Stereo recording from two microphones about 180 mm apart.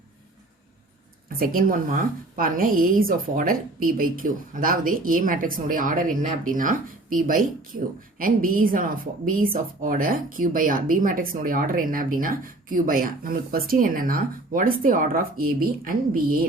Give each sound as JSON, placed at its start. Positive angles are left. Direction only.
{"t": 1.3, "sound": "a woman's voice", "side_deg": -55}